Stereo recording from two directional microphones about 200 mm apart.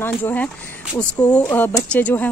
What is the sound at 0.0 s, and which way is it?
A woman's voice, 10° left (ahead or behind).